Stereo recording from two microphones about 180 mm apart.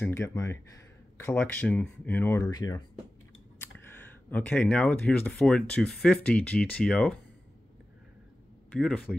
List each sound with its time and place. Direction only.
0.0 s speech: 15° left (ahead or behind)
2.5 s speech: 20° left (ahead or behind); by 7.2 s 5° left (ahead or behind)
8.7 s speech: 5° left (ahead or behind)